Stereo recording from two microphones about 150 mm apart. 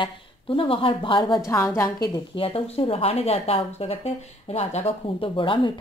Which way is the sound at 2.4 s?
40° left (ahead or behind).